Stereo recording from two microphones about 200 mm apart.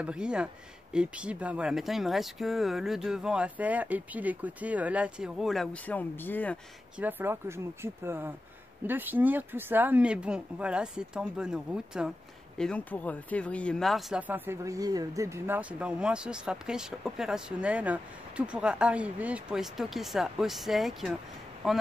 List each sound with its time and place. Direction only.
0.0 s speech: 5° right (ahead or behind)
7.0 s speech: 10° right (ahead or behind)